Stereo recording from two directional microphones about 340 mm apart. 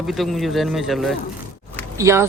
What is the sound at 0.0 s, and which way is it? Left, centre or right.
A man's voice, centre.